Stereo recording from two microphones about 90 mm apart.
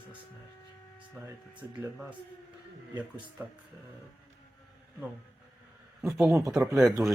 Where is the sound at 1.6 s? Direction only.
20° right (ahead or behind).